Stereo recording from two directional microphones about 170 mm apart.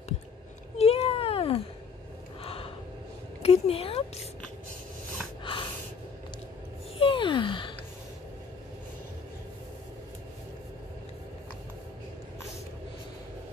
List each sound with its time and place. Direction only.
0.7 s cat: 35° left (ahead or behind)
2.4 s gasp: 35° left (ahead or behind)
3.4 s speech: 35° left (ahead or behind)
5.4 s snort: 30° left (ahead or behind)
7.0 s gasp: 30° left (ahead or behind)